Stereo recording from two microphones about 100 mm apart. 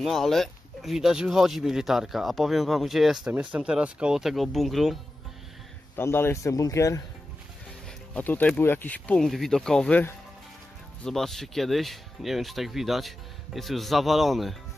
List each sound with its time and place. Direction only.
0.0 s speech: centre (ahead or behind)
3.3 s speech: 15° right (ahead or behind)
5.9 s speech: 25° left (ahead or behind)
8.1 s speech: 15° left (ahead or behind)
11.1 s speech: 5° left (ahead or behind)